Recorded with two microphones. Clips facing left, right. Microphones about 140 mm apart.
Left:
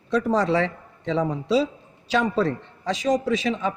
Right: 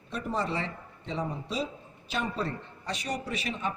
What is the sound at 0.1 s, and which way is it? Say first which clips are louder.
A man's voice: left 11 dB; 90° left.